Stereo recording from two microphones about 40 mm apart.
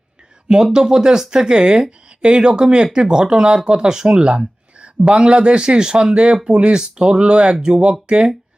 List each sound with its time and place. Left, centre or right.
0.4 s speech: centre